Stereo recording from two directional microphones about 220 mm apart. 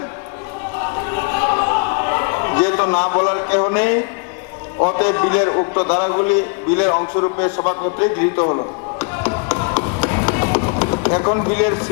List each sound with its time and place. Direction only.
1.1 s a sound: 15° left (ahead or behind)
3.6 s a man's voice: 15° left (ahead or behind)
9.6 s music: 25° left (ahead or behind)
11.5 s a man's voice: 20° left (ahead or behind)